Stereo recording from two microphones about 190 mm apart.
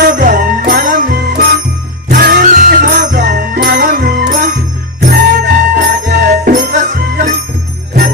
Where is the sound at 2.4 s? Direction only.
40° right (ahead or behind).